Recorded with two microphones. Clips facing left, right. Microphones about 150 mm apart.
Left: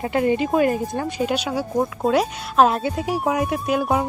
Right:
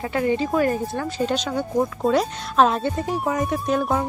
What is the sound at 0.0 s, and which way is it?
Speech, 20° left (ahead or behind).